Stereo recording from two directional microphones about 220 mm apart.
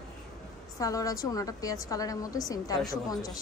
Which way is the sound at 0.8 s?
15° left (ahead or behind).